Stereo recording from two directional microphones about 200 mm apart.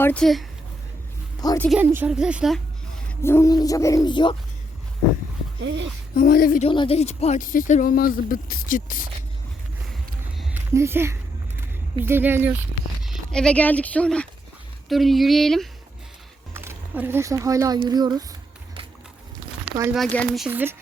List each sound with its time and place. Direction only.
0.0 s speech: 5° left (ahead or behind)
1.4 s a woman's voice: 20° left (ahead or behind)
1.8 s speech: 10° right (ahead or behind)
3.1 s speech: 10° left (ahead or behind)
5.6 s speech: 65° right (ahead or behind)
6.1 s speech: 45° left (ahead or behind)
6.7 s speech: 25° left (ahead or behind); by 9.0 s 45° left (ahead or behind)
10.3 s a sound: 10° right (ahead or behind)
11.9 s speech: 10° right (ahead or behind)
13.1 s speech: 5° left (ahead or behind)
16.6 s speech: 10° right (ahead or behind)
19.9 s speech: 5° left (ahead or behind)